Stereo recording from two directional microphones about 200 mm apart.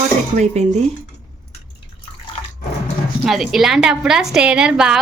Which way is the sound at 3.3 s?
Centre (ahead or behind).